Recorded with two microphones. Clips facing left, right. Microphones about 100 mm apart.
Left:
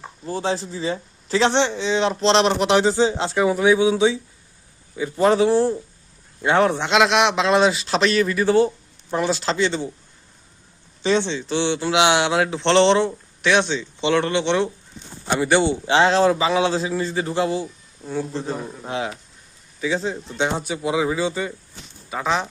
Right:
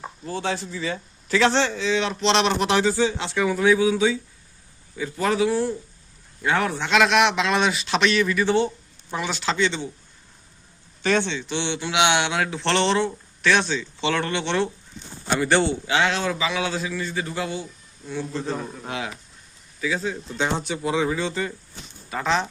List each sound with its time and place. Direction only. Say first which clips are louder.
0.3 s speech: left 3 dB; 30° left (ahead or behind)
2.5 s a man's voice: left 3 dB; 20° left (ahead or behind); by 9.9 s 35° left (ahead or behind)
11.0 s speech: left 2 dB; 25° left (ahead or behind)
15.6 s a man's voice: left 5 dB; 30° left (ahead or behind)
18.3 s speech: left 1 dB; 20° left (ahead or behind)
20.6 s speech: left 2 dB; 10° left (ahead or behind)